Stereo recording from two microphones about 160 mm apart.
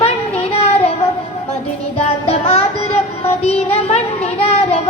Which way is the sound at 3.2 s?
40° left (ahead or behind).